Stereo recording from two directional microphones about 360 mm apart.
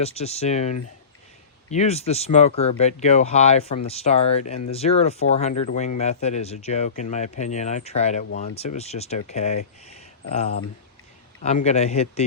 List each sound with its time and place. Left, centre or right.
0.0 s a man's voice: centre
11.4 s a man's voice: centre